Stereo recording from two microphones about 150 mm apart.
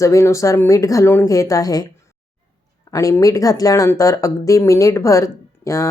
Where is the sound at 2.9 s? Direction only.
20° left (ahead or behind).